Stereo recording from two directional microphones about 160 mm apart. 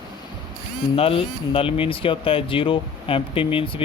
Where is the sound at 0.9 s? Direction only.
35° left (ahead or behind).